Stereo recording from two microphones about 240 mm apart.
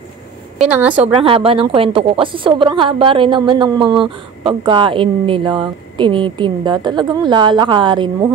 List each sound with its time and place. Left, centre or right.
0.6 s a woman's voice: centre
1.1 s a woman's voice: right